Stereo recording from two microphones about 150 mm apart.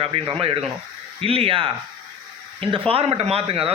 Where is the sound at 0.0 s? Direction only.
40° right (ahead or behind).